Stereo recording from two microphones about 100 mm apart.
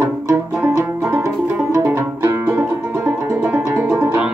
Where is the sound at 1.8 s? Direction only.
25° right (ahead or behind).